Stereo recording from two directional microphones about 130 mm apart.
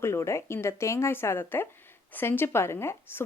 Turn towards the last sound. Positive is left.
turn(degrees=20)  # may be behind; listen again after turning